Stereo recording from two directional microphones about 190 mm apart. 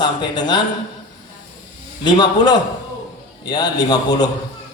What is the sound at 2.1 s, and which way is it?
A man's voice, 20° left (ahead or behind).